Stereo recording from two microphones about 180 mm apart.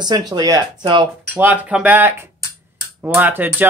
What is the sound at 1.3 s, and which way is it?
Speech, 10° right (ahead or behind).